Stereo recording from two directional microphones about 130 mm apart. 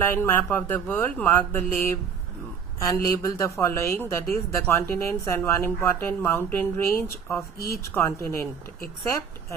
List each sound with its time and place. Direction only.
0.0 s a woman's voice: 15° left (ahead or behind)